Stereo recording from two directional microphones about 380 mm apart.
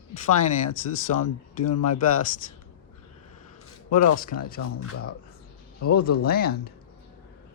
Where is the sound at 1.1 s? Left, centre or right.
Left.